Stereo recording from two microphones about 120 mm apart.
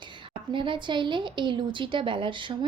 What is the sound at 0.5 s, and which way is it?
A woman's voice, 40° right (ahead or behind).